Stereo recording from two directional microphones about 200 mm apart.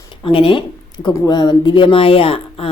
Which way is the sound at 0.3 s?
25° left (ahead or behind).